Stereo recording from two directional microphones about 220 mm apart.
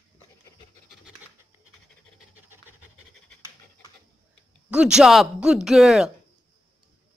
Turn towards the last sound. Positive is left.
turn(degrees=0)  # may be behind; listen again after turning